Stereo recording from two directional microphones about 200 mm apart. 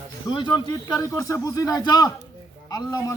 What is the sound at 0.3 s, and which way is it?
A man's voice, 20° left (ahead or behind).